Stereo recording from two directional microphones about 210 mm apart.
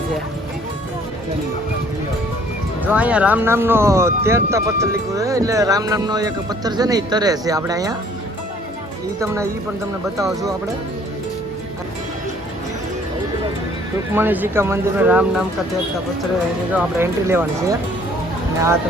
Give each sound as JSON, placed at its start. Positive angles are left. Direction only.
{"t": 2.8, "sound": "speech", "side_deg": -5}
{"t": 9.2, "sound": "speech", "side_deg": -15}
{"t": 14.1, "sound": "speech", "side_deg": -10}
{"t": 16.7, "sound": "speech", "side_deg": -10}